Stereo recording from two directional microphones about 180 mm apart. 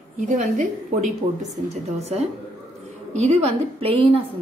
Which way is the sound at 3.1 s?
40° right (ahead or behind).